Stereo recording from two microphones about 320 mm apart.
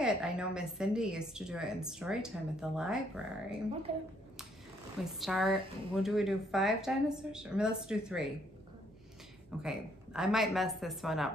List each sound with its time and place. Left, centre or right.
0.0 s a woman's voice: centre
3.9 s a woman's voice: centre
5.0 s a woman's voice: centre
9.6 s a woman's voice: centre